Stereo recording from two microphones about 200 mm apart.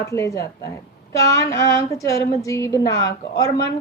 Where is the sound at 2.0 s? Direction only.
15° left (ahead or behind).